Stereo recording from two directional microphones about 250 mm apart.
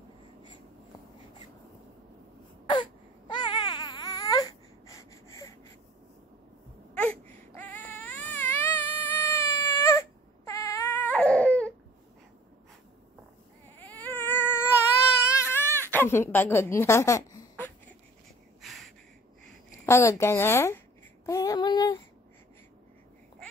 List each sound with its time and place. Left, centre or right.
2.6 s baby cry: centre
6.9 s baby cry: centre
13.7 s cat: centre
15.3 s baby cry: centre
18.6 s a sound: centre
19.9 s a woman's voice: centre
21.3 s female singing: centre